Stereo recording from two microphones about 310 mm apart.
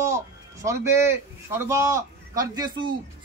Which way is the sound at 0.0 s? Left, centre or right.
Centre.